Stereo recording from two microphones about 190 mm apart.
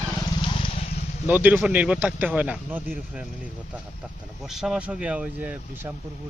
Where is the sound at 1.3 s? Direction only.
10° right (ahead or behind).